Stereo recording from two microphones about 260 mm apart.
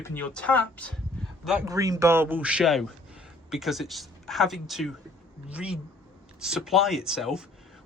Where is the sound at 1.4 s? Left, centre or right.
Centre.